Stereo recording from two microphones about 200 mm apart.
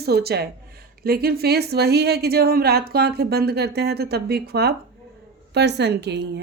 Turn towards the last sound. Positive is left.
turn(degrees=-55)  # may be behind; listen again after turning